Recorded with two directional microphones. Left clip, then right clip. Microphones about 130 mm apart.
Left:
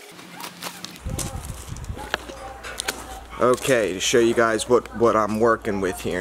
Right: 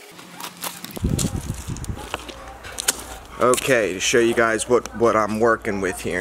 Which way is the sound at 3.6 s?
Centre (ahead or behind).